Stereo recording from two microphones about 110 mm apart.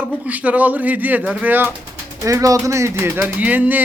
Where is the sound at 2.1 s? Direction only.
30° right (ahead or behind).